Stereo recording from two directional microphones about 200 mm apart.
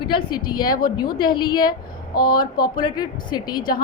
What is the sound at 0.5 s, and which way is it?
Speech, 20° left (ahead or behind).